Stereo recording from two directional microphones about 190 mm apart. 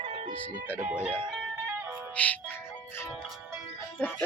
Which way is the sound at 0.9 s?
5° right (ahead or behind).